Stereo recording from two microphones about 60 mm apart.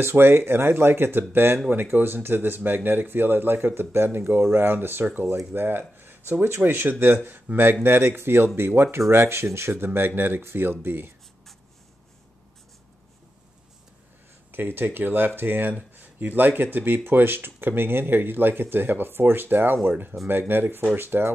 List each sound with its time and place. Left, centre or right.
0.0 s speech: right
14.5 s speech: right